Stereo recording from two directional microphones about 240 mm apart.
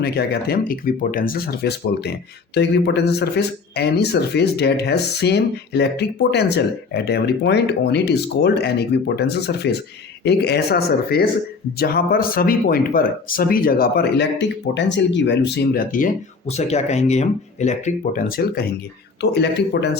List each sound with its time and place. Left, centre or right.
0.0 s speech: left